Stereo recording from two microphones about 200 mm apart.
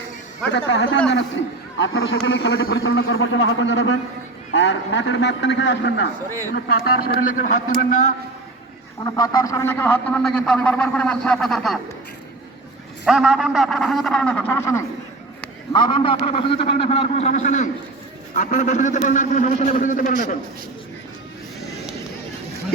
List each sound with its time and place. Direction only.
0.5 s a man's voice: 60° left (ahead or behind)
6.5 s a man's voice: 50° left (ahead or behind)
9.0 s a man's voice: 15° left (ahead or behind); by 11.8 s centre (ahead or behind)
13.1 s a man's voice: 5° right (ahead or behind); by 20.1 s 40° left (ahead or behind)